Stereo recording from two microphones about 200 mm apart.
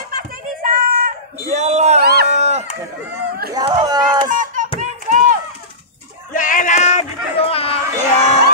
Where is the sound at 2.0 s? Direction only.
55° right (ahead or behind).